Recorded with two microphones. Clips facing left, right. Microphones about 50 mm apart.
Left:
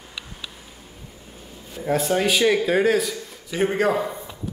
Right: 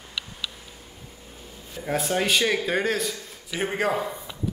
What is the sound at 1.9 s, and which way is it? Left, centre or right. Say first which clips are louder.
A man's voice: left 3 dB; centre.